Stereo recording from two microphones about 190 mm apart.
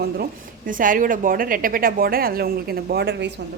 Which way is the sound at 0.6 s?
45° right (ahead or behind).